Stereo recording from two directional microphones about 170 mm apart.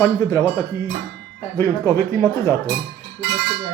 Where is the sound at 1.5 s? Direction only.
15° left (ahead or behind).